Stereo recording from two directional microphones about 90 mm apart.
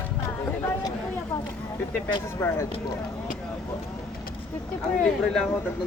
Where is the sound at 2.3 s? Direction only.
30° left (ahead or behind).